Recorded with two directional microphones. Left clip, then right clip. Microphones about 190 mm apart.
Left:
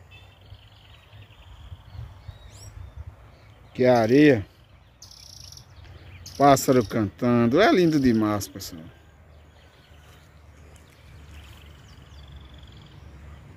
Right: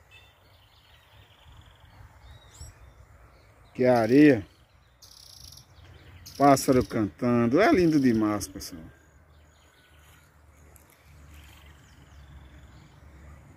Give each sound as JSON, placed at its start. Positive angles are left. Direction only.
{"t": 3.7, "sound": "speech", "side_deg": 0}
{"t": 6.2, "sound": "speech", "side_deg": 0}